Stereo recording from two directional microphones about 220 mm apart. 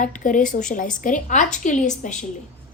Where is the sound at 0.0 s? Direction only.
35° left (ahead or behind).